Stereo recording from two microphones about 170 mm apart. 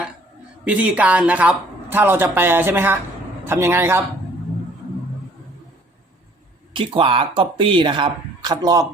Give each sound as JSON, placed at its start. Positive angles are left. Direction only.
{"t": 0.6, "sound": "speech", "side_deg": -10}
{"t": 6.7, "sound": "speech", "side_deg": -30}